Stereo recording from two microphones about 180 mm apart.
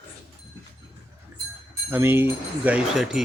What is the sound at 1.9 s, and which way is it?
Speech, 10° right (ahead or behind).